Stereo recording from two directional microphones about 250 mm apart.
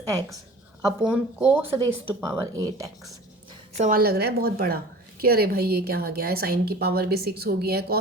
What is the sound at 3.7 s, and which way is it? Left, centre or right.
A woman's voice, right.